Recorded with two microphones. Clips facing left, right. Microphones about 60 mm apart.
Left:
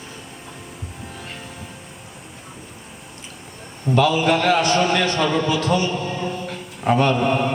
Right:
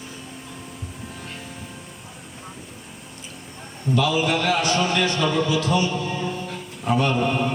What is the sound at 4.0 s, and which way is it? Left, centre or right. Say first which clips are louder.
A man's voice: left 4 dB; left.